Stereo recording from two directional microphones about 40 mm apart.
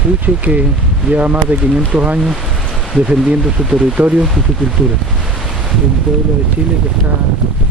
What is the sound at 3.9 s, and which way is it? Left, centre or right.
Speech, right.